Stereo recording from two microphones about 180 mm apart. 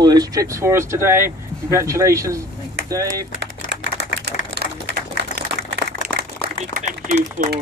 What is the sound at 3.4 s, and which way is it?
Typewriter, 70° right (ahead or behind).